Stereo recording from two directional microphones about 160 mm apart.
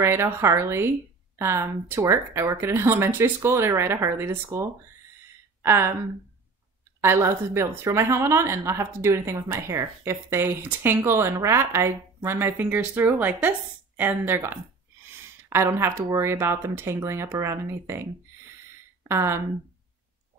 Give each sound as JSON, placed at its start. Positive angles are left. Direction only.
{"t": 0.0, "sound": "a woman's voice", "side_deg": -15}
{"t": 7.0, "sound": "a woman's voice", "side_deg": -15}
{"t": 15.0, "sound": "a sound", "side_deg": -15}
{"t": 16.1, "sound": "a woman's voice", "side_deg": -15}
{"t": 19.0, "sound": "a woman's voice", "side_deg": -15}